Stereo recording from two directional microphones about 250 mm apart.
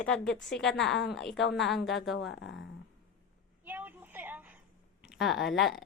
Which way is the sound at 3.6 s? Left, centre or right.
Centre.